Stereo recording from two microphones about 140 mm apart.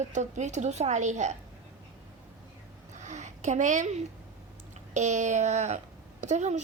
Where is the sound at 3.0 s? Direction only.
55° right (ahead or behind).